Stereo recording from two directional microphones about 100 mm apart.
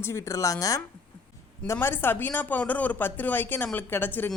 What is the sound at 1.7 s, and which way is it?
Speech, 20° left (ahead or behind).